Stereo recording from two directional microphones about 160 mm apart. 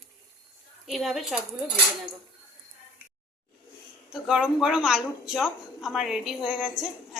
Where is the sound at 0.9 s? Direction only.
Centre (ahead or behind).